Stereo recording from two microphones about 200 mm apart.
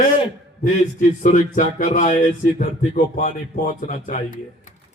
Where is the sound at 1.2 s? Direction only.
40° left (ahead or behind).